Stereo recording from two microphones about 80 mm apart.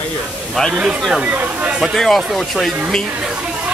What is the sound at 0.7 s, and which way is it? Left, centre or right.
Speech, centre.